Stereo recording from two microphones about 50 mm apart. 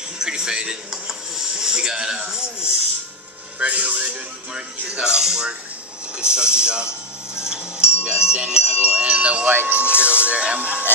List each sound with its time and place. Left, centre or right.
0.2 s television: centre
3.5 s speech: right
7.4 s bell: centre
9.5 s speech: right